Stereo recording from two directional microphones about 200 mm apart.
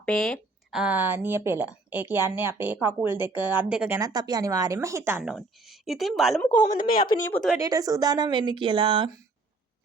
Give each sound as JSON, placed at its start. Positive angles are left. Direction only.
{"t": 0.0, "sound": "a woman's voice", "side_deg": 0}
{"t": 7.6, "sound": "a woman's voice", "side_deg": -15}